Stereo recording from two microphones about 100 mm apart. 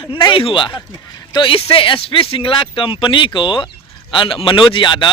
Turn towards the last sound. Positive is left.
turn(degrees=50)  # may be behind; listen again after turning